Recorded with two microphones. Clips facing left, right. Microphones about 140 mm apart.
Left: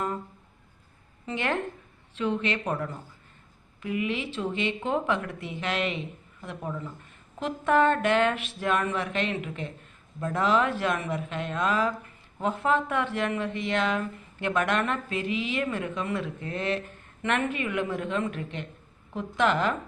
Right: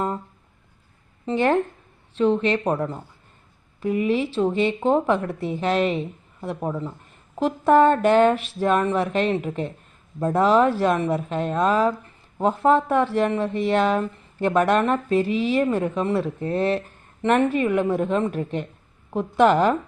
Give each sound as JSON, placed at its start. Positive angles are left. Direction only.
{"t": 1.2, "sound": "a woman's voice", "side_deg": -35}